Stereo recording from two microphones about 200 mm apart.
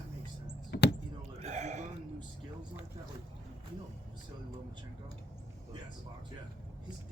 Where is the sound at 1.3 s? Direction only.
35° right (ahead or behind).